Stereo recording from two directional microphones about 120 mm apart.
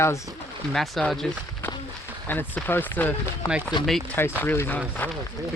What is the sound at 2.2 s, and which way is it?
Speech, 15° left (ahead or behind).